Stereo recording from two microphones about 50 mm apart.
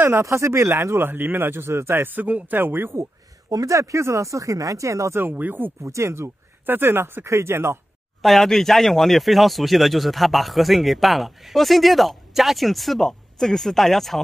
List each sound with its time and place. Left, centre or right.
0.2 s speech: right
2.1 s speech: right
3.0 s speech: right
5.3 s speech: right
5.9 s speech: right
6.6 s speech: right
8.2 s speech: centre